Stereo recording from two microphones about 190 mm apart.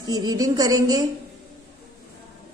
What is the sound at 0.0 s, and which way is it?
A woman's voice, 20° right (ahead or behind).